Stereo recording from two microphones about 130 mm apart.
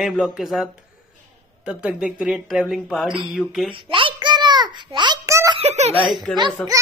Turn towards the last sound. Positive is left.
turn(degrees=10)  # may be behind; listen again after turning